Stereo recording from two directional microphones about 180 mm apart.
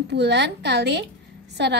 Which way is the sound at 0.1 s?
70° right (ahead or behind).